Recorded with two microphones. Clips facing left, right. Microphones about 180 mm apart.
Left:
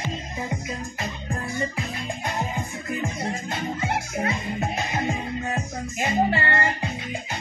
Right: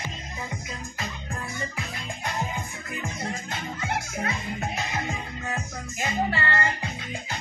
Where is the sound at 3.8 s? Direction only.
25° left (ahead or behind).